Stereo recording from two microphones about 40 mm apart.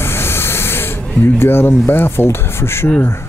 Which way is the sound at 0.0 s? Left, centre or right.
Left.